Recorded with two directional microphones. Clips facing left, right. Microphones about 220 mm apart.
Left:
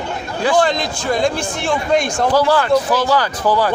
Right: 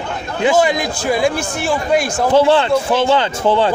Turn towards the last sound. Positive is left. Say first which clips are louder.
# right 2 dB
turn(degrees=-25)  # may be behind; listen again after turning